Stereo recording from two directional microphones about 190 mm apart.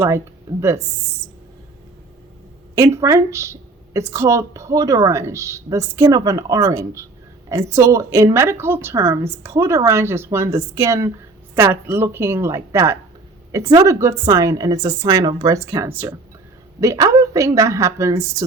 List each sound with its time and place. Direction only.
2.7 s a woman's voice: 15° right (ahead or behind)